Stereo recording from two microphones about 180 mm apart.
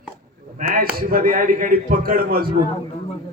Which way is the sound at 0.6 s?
55° right (ahead or behind).